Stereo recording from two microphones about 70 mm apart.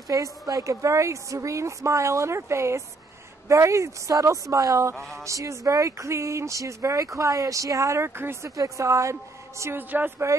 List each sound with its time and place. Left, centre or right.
0.1 s a woman's voice: right
8.5 s a woman's voice: right
9.8 s speech: right